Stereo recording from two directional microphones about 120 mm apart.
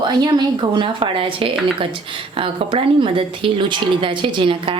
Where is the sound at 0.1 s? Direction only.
40° right (ahead or behind).